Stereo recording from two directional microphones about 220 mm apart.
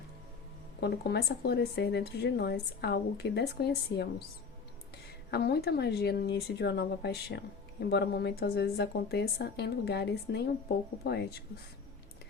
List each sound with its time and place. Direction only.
0.8 s a woman's voice: 50° left (ahead or behind)
5.3 s a woman's voice: 45° left (ahead or behind)